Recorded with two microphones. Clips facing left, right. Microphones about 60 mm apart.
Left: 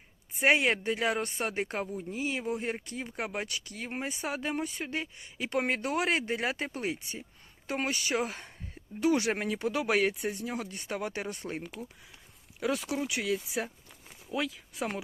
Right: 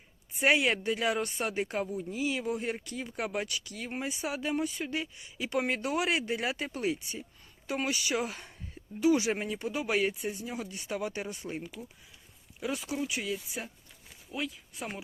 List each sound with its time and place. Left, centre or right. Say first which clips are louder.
0.3 s speech: left 1 dB; left
9.0 s speech: right 1 dB; left
12.5 s speech: left 3 dB; left